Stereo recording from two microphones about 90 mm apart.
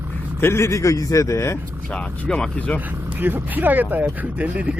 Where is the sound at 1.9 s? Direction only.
10° left (ahead or behind).